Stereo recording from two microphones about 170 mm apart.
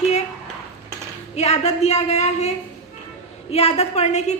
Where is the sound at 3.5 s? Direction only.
40° left (ahead or behind).